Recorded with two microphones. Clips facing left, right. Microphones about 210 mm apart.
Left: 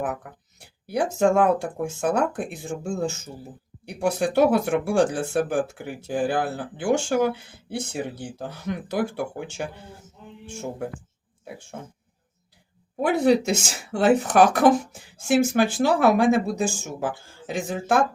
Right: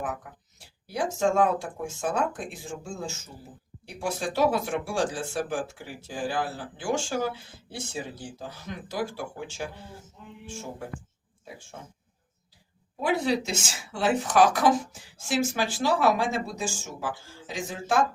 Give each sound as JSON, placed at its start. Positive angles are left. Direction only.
{"t": 0.0, "sound": "speech", "side_deg": 60}
{"t": 13.0, "sound": "speech", "side_deg": 55}